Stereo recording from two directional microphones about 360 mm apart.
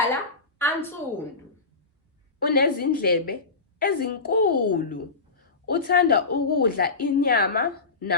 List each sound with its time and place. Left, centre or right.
0.6 s a woman's voice: centre
2.5 s a woman's voice: left